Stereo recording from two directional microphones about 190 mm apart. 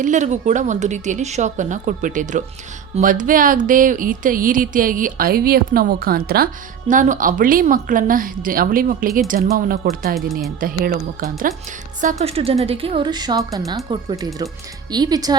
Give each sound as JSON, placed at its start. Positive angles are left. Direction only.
{"t": 0.0, "sound": "a woman's voice", "side_deg": -40}
{"t": 12.0, "sound": "a woman's voice", "side_deg": -35}